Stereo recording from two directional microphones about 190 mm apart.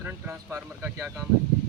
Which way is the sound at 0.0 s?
10° right (ahead or behind).